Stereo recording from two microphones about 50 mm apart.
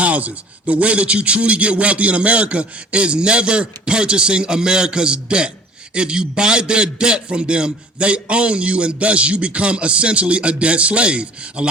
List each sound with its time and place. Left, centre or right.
0.0 s a man's voice: right